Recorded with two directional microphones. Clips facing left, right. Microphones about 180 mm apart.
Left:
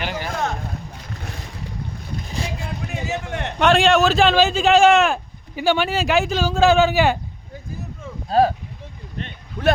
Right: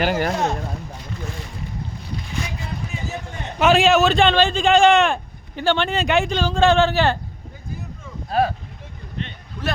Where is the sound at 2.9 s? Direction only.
70° left (ahead or behind).